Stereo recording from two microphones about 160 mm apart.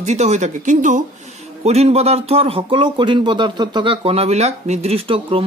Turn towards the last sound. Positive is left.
turn(degrees=-35)  # may be behind; listen again after turning